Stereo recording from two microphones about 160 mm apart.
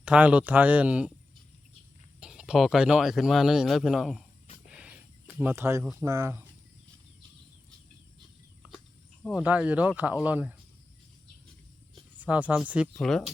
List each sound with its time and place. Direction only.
0.0 s speech: 10° right (ahead or behind)
2.2 s speech: 5° right (ahead or behind)
4.7 s a sound: 5° right (ahead or behind)
5.4 s speech: 15° right (ahead or behind)
8.6 s cricket: 10° right (ahead or behind)
9.3 s speech: 10° right (ahead or behind)
12.1 s speech: 10° right (ahead or behind)